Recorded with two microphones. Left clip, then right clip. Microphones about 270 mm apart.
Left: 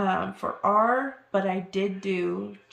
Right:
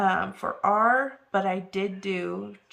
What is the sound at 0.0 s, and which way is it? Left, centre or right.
Speech, centre.